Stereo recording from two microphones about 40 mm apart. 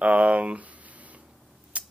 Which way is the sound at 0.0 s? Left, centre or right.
Right.